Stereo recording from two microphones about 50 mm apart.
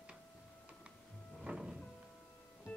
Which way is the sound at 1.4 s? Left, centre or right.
Centre.